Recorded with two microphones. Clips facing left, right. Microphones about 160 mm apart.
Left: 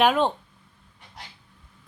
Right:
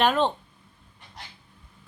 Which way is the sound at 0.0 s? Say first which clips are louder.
Left 2 dB; 10° left (ahead or behind).